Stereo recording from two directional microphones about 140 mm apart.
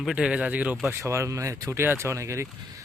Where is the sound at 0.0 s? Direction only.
5° right (ahead or behind).